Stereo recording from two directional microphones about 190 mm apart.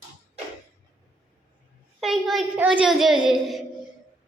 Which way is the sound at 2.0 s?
Centre (ahead or behind).